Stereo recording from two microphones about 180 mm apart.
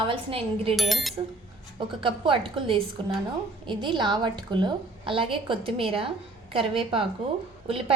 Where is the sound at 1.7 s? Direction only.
30° right (ahead or behind).